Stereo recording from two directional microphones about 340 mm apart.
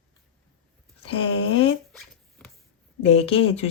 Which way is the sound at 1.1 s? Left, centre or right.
Centre.